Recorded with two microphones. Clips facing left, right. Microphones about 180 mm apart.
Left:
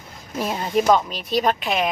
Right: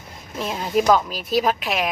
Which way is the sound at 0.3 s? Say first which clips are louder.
Even; centre (ahead or behind).